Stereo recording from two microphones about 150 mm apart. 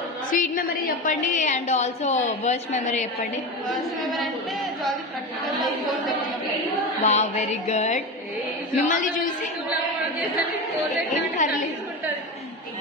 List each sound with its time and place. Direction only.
0.3 s a woman's voice: 65° left (ahead or behind)
3.6 s a woman's voice: centre (ahead or behind)
7.0 s a woman's voice: 50° left (ahead or behind)
8.7 s a woman's voice: 60° left (ahead or behind)
11.1 s a woman's voice: 55° left (ahead or behind)